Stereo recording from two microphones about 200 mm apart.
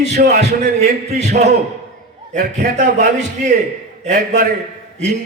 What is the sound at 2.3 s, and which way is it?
Speech, 35° right (ahead or behind).